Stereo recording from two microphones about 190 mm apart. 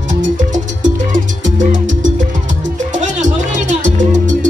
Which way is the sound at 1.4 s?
40° right (ahead or behind).